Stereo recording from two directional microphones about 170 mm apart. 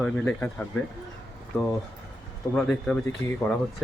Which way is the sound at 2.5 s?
5° left (ahead or behind).